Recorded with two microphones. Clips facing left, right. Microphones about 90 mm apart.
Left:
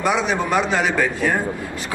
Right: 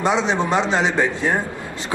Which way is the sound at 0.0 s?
25° right (ahead or behind).